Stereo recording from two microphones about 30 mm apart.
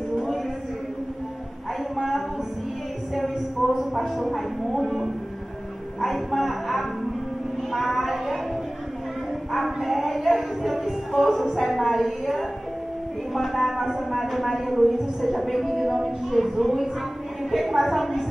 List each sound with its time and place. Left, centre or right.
3.7 s speech: centre
5.9 s speech: centre
9.5 s music: centre
11.5 s speech: centre